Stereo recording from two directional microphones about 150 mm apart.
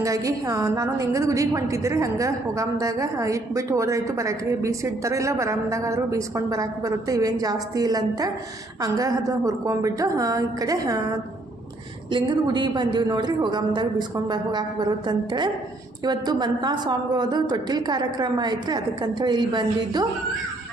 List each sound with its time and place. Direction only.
0.0 s a woman's voice: 20° right (ahead or behind)
12.1 s a woman's voice: 30° right (ahead or behind)